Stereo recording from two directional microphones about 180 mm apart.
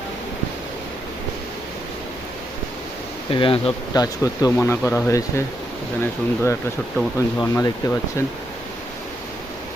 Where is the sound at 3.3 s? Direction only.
30° left (ahead or behind); by 7.9 s 15° left (ahead or behind).